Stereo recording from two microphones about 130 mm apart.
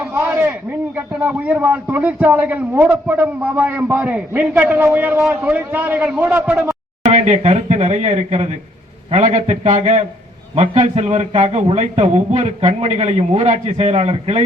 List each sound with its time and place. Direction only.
0.0 s a man's voice: 15° right (ahead or behind)
7.1 s a man's voice: 60° right (ahead or behind)